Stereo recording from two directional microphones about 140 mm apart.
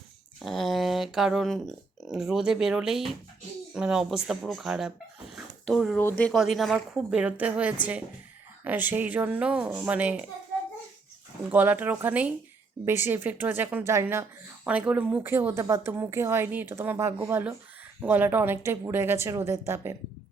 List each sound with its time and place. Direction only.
0.4 s speech: centre (ahead or behind)
5.3 s dog: centre (ahead or behind)
6.0 s speech: 15° left (ahead or behind)
6.3 s speech: centre (ahead or behind)
11.4 s speech: 10° right (ahead or behind)